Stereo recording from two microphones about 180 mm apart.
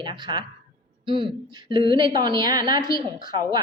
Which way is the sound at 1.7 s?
25° right (ahead or behind).